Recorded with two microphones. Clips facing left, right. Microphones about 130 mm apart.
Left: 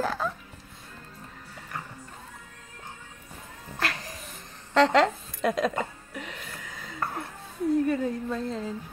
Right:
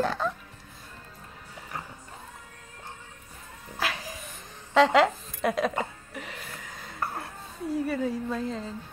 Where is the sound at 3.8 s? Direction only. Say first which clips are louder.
Even; 5° right (ahead or behind).